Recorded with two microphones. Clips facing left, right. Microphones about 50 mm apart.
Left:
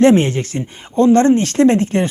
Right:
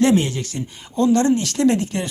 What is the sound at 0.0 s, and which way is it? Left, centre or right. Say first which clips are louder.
Speech: left 6 dB; left.